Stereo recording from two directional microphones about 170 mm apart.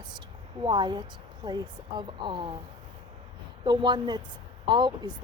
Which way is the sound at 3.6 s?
25° right (ahead or behind).